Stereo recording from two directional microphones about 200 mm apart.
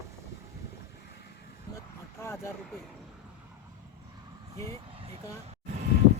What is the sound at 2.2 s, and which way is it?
Vehicle, 15° left (ahead or behind).